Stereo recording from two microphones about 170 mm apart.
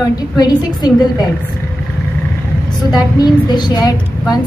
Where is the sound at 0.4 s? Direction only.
25° left (ahead or behind).